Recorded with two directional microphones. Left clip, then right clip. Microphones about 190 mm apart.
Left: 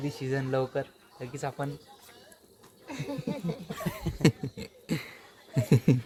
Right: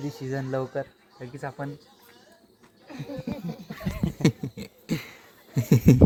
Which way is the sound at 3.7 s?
30° left (ahead or behind).